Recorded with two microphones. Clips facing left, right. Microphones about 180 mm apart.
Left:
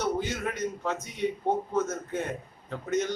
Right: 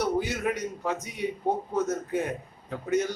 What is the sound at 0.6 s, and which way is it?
A man's voice, 10° right (ahead or behind).